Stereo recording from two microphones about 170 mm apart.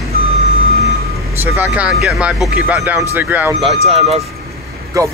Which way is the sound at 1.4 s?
10° right (ahead or behind).